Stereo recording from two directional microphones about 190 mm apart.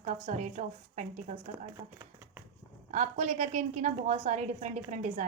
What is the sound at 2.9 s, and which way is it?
A woman's voice, 35° right (ahead or behind).